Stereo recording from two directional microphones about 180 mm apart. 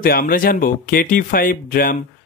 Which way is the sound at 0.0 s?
50° left (ahead or behind).